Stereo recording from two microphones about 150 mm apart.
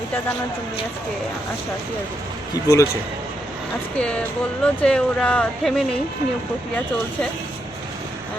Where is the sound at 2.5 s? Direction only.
20° left (ahead or behind).